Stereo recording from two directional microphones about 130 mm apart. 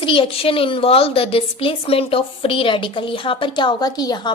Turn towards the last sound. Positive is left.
turn(degrees=35)  # may be behind; listen again after turning